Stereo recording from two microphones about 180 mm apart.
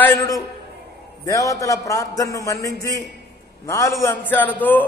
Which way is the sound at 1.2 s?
20° left (ahead or behind).